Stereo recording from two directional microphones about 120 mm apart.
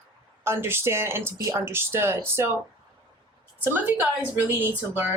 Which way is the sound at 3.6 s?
15° right (ahead or behind).